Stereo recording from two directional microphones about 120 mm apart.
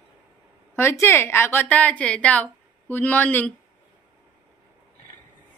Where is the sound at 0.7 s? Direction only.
20° left (ahead or behind).